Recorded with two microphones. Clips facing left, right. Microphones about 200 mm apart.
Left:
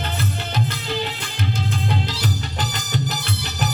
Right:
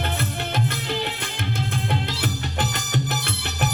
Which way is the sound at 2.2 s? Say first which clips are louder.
Even; 55° right (ahead or behind).